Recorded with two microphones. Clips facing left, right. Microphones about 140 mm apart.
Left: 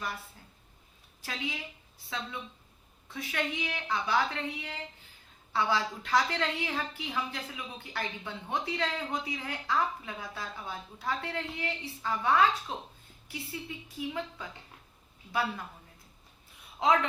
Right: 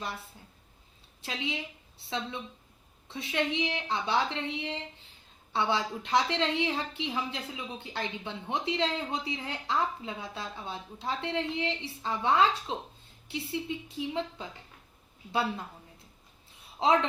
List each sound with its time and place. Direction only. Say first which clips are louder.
1.2 s a woman's voice: right 2 dB; 25° right (ahead or behind)
16.8 s a woman's voice: right 1 dB; 30° right (ahead or behind)